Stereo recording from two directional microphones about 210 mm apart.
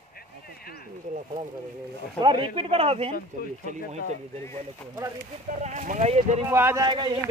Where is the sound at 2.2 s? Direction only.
20° right (ahead or behind).